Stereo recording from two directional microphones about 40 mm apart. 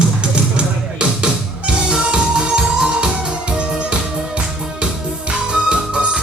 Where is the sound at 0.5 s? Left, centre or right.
Right.